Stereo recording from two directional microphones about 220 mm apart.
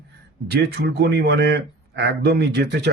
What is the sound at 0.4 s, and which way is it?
Speech, 45° right (ahead or behind).